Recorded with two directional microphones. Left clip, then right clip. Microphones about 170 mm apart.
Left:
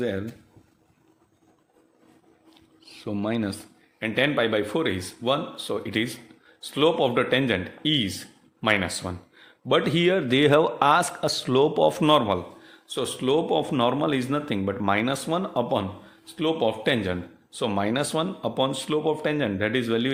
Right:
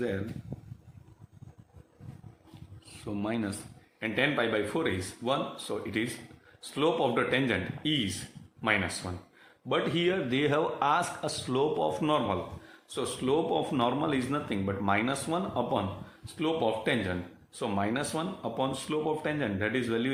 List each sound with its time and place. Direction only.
2.8 s speech: 40° left (ahead or behind); by 20.1 s 55° left (ahead or behind)